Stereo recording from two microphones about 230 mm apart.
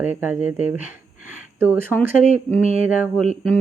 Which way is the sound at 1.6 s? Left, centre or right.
Centre.